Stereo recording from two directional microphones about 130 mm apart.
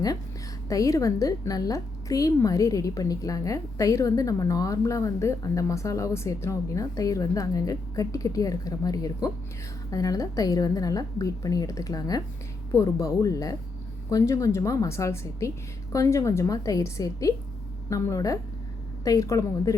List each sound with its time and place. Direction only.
0.7 s a woman's voice: 25° left (ahead or behind)